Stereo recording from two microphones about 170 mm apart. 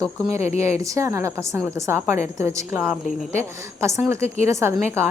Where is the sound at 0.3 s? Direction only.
40° left (ahead or behind).